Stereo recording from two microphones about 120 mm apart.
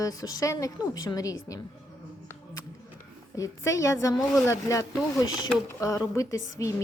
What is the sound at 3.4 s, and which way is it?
A woman's voice, 25° left (ahead or behind).